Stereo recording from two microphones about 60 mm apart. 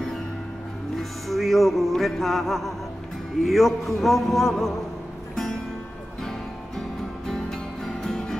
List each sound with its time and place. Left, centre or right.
0.9 s music: centre
3.4 s a sound: centre
5.3 s music: centre
7.2 s music: centre